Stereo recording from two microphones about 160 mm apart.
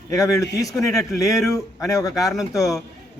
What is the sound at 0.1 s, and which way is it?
A man's voice, 20° left (ahead or behind).